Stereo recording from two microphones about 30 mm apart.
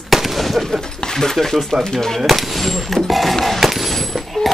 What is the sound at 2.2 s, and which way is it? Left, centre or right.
Speech, centre.